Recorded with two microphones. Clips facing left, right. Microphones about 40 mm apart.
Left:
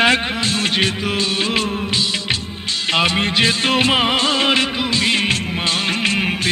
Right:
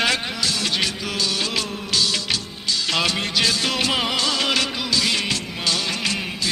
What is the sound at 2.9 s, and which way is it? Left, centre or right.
Music, left.